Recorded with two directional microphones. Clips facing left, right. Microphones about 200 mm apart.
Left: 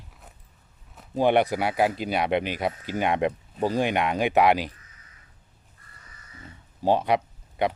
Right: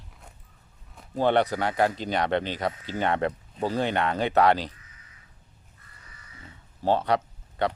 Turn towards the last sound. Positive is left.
turn(degrees=10)  # may be behind; listen again after turning